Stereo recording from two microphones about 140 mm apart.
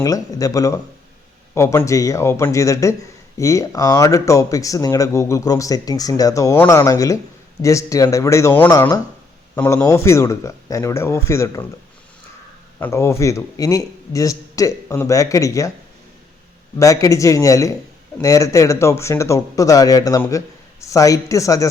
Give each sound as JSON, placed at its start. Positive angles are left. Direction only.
{"t": 0.0, "sound": "speech", "side_deg": 25}
{"t": 12.8, "sound": "speech", "side_deg": 20}
{"t": 16.7, "sound": "speech", "side_deg": 25}